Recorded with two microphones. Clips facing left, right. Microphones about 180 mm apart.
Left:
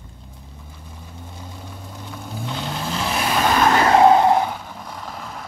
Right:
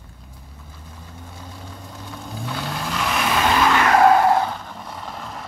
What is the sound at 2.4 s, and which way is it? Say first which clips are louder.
Vehicle: left 1 dB; 20° left (ahead or behind).